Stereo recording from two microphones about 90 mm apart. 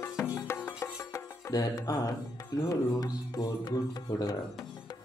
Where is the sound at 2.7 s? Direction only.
45° left (ahead or behind).